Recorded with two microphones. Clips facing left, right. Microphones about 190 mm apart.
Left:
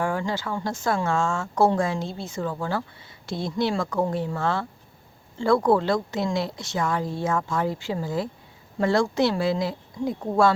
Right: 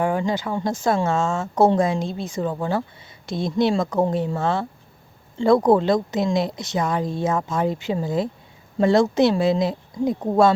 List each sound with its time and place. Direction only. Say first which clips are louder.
0.0 s a woman's voice: right 4 dB; 20° right (ahead or behind)